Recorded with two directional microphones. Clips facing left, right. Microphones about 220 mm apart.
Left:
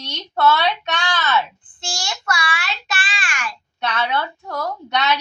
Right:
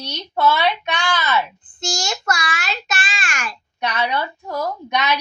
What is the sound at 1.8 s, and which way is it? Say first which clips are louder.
A child's voice: right 4 dB; 45° right (ahead or behind).